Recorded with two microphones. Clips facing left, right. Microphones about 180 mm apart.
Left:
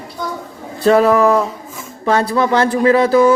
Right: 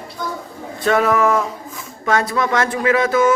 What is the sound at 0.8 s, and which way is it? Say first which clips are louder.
Speech: left 5 dB; 30° left (ahead or behind).